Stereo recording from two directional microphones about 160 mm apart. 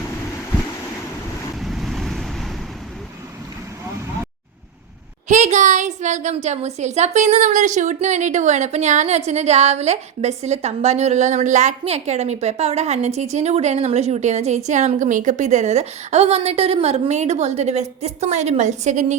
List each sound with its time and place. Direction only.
1.6 s waves: centre (ahead or behind)
5.3 s a woman's voice: 45° right (ahead or behind)